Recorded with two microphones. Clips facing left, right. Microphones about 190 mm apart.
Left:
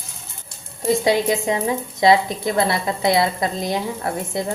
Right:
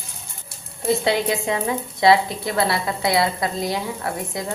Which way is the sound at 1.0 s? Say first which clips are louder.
Left 3 dB; 15° left (ahead or behind).